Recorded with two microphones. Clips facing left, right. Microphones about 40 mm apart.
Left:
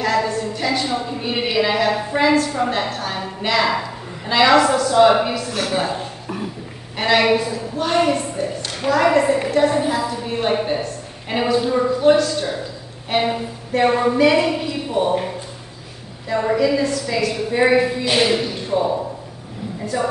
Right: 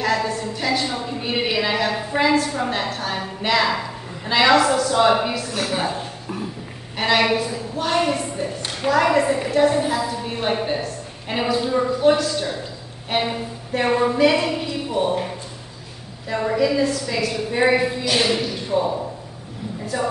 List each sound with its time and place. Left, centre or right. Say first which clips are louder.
0.0 s a woman's voice: left 2 dB; centre
5.5 s a woman's voice: left 2 dB; left
7.0 s a woman's voice: left 2 dB; centre
16.5 s a woman's voice: right 1 dB; centre
18.1 s speech: left 3 dB; centre
19.9 s a woman's voice: left 2 dB; centre